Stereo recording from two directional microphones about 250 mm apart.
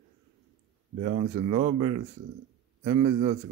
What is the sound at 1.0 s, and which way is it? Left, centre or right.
A man's voice, right.